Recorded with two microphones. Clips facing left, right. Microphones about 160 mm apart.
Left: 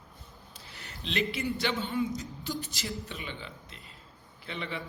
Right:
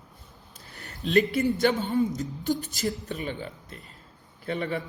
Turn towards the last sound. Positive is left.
turn(degrees=-50)  # may be behind; listen again after turning